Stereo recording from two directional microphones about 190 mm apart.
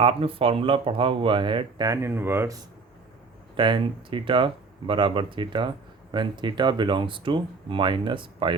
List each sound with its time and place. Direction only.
0.0 s speech: 30° right (ahead or behind); by 2.6 s 10° right (ahead or behind)
3.6 s speech: 25° right (ahead or behind)